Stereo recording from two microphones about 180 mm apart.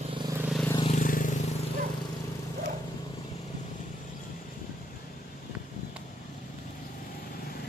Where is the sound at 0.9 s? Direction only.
45° left (ahead or behind).